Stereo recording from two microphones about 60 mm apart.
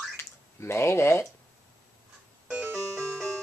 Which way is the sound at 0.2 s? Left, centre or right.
Left.